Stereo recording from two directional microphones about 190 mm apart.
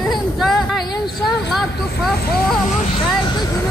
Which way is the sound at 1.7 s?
60° left (ahead or behind).